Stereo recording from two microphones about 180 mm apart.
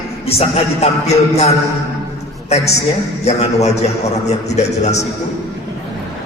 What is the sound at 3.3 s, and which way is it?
A man's voice, 40° left (ahead or behind).